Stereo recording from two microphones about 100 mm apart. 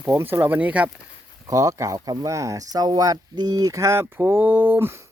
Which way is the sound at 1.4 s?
35° right (ahead or behind).